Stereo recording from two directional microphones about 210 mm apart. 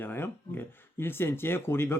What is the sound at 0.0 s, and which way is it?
Speech, 10° left (ahead or behind).